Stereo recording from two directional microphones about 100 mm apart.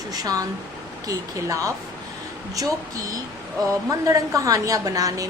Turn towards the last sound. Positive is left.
turn(degrees=-35)  # may be behind; listen again after turning